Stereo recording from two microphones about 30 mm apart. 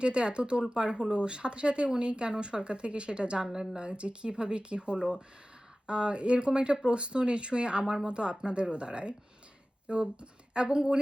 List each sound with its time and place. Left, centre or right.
0.0 s a woman's voice: right
3.4 s speech: right
3.8 s a woman's voice: right